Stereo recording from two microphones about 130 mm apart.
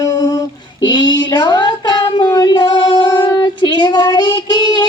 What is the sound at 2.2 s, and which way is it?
Child singing, 30° left (ahead or behind).